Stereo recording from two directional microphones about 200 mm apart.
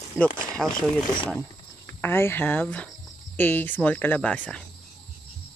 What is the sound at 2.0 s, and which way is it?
Speech, 10° left (ahead or behind).